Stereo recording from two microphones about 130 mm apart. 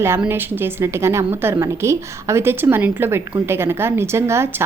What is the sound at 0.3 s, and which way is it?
A woman's voice, 20° right (ahead or behind).